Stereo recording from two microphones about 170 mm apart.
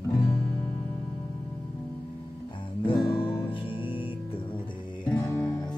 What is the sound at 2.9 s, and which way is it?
Music, 30° left (ahead or behind).